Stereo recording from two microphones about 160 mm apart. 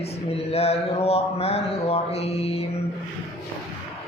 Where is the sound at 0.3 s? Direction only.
40° left (ahead or behind).